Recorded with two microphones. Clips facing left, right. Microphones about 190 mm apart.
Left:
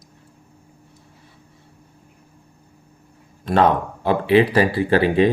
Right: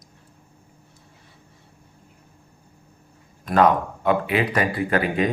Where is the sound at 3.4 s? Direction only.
30° left (ahead or behind).